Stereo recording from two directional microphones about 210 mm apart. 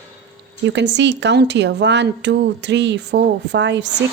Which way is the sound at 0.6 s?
55° right (ahead or behind).